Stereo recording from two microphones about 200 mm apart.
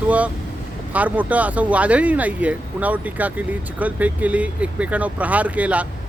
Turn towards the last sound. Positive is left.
turn(degrees=-5)  # may be behind; listen again after turning